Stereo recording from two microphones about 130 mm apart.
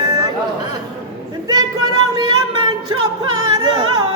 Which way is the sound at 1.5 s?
30° right (ahead or behind).